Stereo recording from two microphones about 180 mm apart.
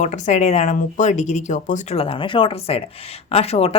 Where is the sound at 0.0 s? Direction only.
40° left (ahead or behind).